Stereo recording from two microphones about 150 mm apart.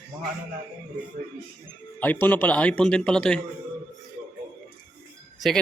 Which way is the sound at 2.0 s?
10° left (ahead or behind).